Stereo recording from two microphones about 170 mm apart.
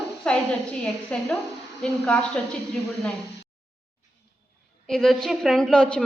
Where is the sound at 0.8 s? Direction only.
5° left (ahead or behind).